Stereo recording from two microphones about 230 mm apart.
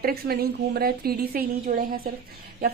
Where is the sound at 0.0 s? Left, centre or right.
Right.